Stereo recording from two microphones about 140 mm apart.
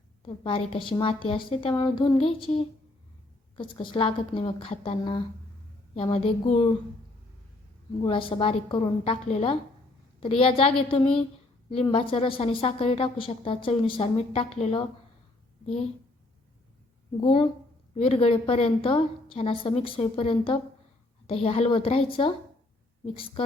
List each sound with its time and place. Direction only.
0.4 s a woman's voice: 40° left (ahead or behind)
3.6 s a woman's voice: 35° left (ahead or behind)
8.0 s a woman's voice: 40° left (ahead or behind)
17.2 s a woman's voice: 40° left (ahead or behind)